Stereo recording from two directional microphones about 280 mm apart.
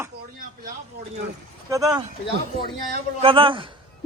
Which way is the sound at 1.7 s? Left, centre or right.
Centre.